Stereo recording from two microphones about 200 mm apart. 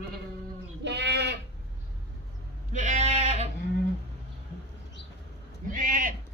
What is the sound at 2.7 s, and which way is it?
Sheep, 40° right (ahead or behind).